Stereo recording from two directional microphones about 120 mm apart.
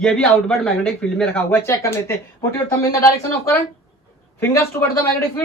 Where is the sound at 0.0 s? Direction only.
5° left (ahead or behind); by 3.0 s 20° left (ahead or behind).